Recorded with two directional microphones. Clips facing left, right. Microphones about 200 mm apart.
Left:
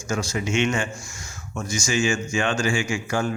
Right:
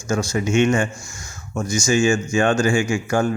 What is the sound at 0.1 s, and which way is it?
Speech, 45° right (ahead or behind).